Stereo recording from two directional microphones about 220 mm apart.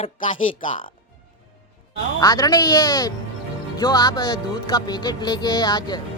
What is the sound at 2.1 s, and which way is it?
Speech, 15° left (ahead or behind).